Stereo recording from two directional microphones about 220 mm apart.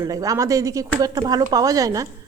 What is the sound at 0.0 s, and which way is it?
A woman's voice, 15° right (ahead or behind).